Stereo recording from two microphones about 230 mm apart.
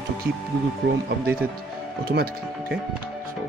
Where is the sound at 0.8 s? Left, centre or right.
Right.